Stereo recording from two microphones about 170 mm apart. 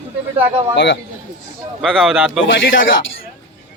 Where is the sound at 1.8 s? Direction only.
Centre (ahead or behind).